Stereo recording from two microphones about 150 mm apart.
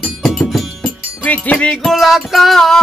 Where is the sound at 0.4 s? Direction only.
5° left (ahead or behind).